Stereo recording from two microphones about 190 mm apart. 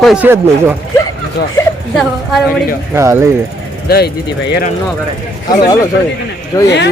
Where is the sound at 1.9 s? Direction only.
Centre (ahead or behind).